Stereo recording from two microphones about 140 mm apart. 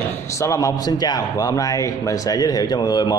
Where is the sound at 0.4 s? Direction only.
25° left (ahead or behind).